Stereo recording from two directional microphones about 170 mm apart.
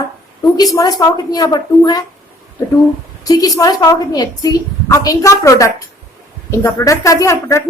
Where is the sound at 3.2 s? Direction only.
20° left (ahead or behind).